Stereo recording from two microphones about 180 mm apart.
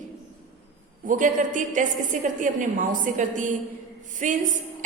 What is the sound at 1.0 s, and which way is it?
A woman's voice, 45° right (ahead or behind).